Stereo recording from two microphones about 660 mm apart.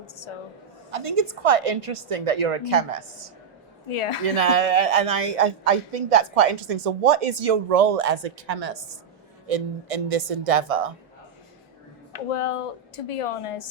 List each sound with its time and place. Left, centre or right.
0.9 s a woman's voice: right
3.8 s a woman's voice: left
4.4 s a man's voice: right
9.5 s a man's voice: right
12.3 s a woman's voice: left